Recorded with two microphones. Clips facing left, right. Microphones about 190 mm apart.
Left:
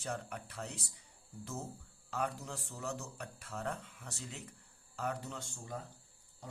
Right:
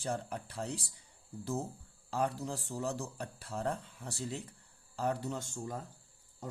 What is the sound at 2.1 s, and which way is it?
Speech, 30° right (ahead or behind).